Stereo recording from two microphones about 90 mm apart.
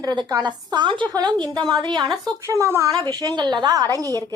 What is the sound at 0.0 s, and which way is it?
A woman's voice, 50° right (ahead or behind).